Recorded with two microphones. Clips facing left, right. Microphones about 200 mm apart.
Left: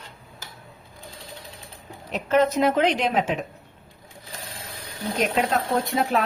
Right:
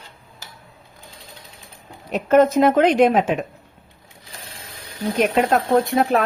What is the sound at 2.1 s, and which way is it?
Speech, 50° right (ahead or behind).